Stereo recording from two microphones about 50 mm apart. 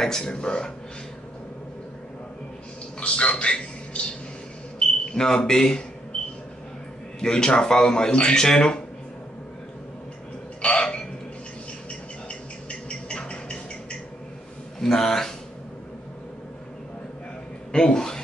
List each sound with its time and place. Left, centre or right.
0.0 s speech: centre
3.0 s a man's voice: left
7.2 s speech: centre
10.6 s a sound: centre
12.3 s a sound: left
14.8 s speech: centre
17.7 s speech: centre